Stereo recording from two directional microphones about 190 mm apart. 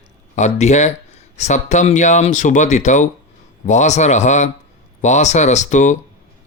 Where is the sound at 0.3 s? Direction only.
35° left (ahead or behind).